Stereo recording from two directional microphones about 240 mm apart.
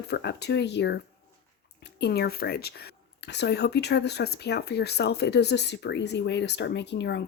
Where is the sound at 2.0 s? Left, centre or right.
Left.